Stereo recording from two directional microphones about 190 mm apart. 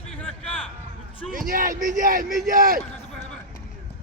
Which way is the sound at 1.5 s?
45° right (ahead or behind).